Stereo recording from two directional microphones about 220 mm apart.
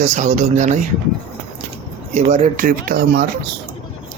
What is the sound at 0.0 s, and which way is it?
Speech, 35° right (ahead or behind).